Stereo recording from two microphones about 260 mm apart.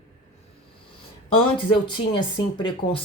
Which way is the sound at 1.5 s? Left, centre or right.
Centre.